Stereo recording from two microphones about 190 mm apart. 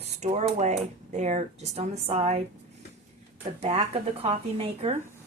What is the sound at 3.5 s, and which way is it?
A woman's voice, 35° right (ahead or behind).